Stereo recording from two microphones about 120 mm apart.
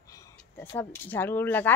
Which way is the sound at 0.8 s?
15° left (ahead or behind).